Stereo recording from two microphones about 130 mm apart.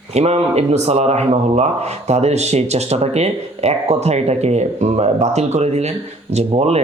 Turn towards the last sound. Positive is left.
turn(degrees=-55)  # may be behind; listen again after turning